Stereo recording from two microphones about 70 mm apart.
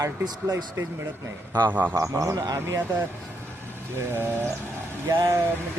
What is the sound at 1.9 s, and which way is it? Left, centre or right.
Speech, right.